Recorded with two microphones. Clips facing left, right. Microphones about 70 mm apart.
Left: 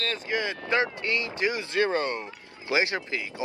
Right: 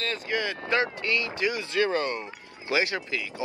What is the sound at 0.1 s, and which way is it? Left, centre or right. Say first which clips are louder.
Speech: even; left.